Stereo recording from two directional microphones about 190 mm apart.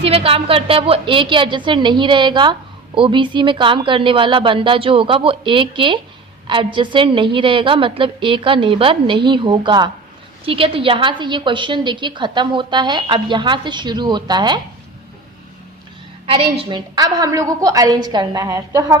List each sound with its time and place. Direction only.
0.0 s a woman's voice: 30° right (ahead or behind)
16.2 s a woman's voice: 30° right (ahead or behind)